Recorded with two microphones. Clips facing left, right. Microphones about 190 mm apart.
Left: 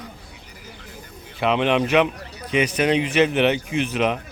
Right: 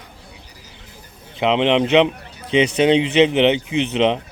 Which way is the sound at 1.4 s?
20° right (ahead or behind).